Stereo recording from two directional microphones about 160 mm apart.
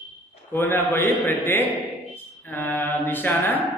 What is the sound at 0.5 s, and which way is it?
A man's voice, 15° left (ahead or behind).